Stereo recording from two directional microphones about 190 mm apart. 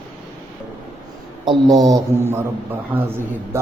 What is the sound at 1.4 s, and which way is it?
Speech, 20° right (ahead or behind).